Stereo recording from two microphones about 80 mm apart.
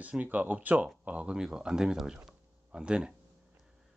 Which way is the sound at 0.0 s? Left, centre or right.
Centre.